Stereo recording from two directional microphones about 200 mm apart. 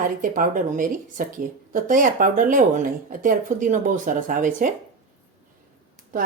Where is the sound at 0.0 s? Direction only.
40° right (ahead or behind).